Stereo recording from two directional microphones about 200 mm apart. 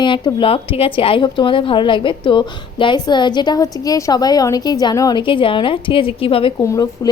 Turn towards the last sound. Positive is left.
turn(degrees=15)  # may be behind; listen again after turning